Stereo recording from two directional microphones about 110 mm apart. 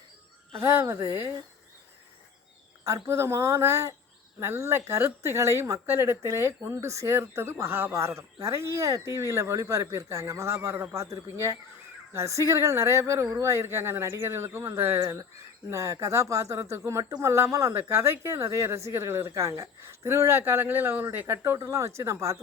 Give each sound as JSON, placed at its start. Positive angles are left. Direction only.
{"t": 0.6, "sound": "speech", "side_deg": -25}
{"t": 2.8, "sound": "speech", "side_deg": -25}